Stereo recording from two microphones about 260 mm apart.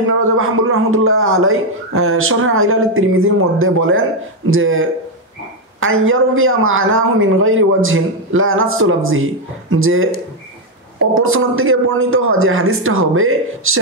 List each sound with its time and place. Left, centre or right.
0.2 s a man's voice: right